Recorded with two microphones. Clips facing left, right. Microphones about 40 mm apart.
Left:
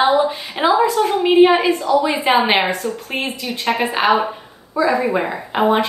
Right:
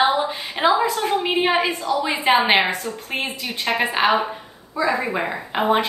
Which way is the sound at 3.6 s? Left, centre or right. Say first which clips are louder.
Left 2 dB; centre.